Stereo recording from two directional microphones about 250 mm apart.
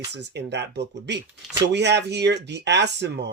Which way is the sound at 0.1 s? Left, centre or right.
Right.